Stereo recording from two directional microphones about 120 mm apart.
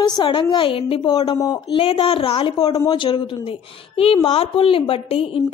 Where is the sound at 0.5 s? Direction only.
50° left (ahead or behind).